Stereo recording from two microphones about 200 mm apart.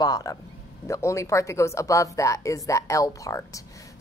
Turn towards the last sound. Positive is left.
turn(degrees=15)  # may be behind; listen again after turning